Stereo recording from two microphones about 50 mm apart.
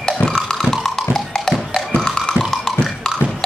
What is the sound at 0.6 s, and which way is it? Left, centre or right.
Music, centre.